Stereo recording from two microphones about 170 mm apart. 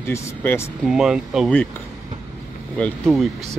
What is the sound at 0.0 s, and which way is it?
Speech, 15° left (ahead or behind).